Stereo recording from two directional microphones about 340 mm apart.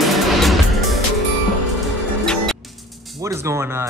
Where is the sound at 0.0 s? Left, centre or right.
Centre.